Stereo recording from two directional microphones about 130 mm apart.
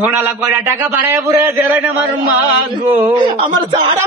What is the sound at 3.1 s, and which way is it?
Speech, 35° right (ahead or behind).